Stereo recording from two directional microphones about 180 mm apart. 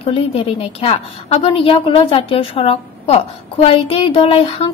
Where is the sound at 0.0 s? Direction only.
35° left (ahead or behind).